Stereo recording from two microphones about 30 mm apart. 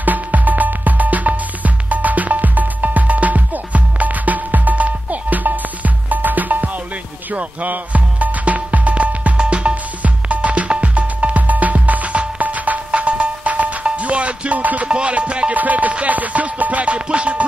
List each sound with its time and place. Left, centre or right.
0.0 s music: right
7.3 s music: right
9.4 s music: right
10.0 s music: right
13.8 s music: right
14.9 s music: right
15.5 s music: right
16.8 s music: right